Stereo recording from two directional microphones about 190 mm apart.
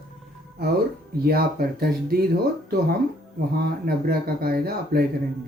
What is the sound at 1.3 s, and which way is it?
Speech, 50° right (ahead or behind).